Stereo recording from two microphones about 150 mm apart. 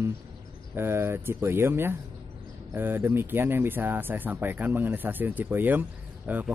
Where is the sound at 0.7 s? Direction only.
15° right (ahead or behind).